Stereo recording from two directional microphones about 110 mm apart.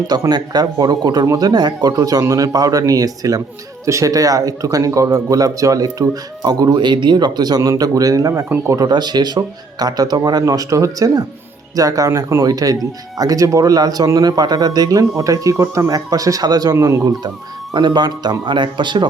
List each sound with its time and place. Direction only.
0.1 s speech: 35° right (ahead or behind)
8.8 s speech: 40° right (ahead or behind)